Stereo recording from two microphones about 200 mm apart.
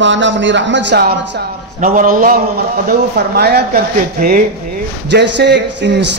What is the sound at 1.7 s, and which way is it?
Speech, 40° right (ahead or behind).